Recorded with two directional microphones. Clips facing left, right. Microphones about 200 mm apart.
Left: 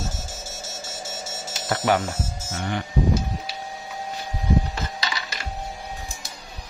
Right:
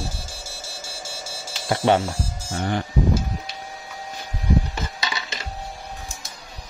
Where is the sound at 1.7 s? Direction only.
25° right (ahead or behind).